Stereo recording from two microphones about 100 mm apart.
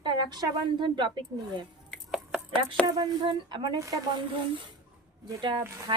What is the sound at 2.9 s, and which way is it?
Speech, 45° right (ahead or behind).